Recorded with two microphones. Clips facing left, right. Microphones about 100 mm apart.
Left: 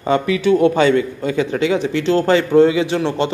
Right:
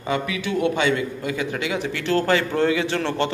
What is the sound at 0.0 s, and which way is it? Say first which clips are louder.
A man's voice: left 9 dB; 35° left (ahead or behind).